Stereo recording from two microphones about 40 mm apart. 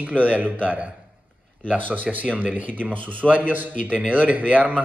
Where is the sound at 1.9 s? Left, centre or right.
Right.